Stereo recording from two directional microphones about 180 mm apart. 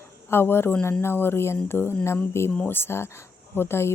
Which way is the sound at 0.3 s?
15° left (ahead or behind).